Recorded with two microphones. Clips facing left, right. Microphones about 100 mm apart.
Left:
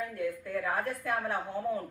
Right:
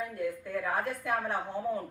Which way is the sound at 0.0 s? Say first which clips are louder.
Even; 10° right (ahead or behind).